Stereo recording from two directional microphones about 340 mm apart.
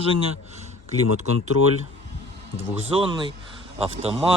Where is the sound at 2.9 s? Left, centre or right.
Centre.